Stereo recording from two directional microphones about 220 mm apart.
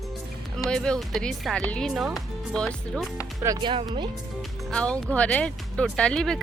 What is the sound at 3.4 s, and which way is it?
Speech, 20° right (ahead or behind).